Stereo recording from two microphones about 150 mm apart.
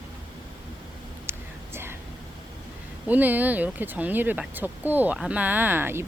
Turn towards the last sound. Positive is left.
turn(degrees=-15)  # may be behind; listen again after turning